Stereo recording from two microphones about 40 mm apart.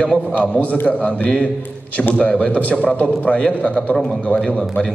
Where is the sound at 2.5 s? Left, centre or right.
Left.